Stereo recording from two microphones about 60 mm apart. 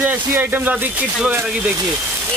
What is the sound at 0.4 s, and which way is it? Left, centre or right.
Speech, right.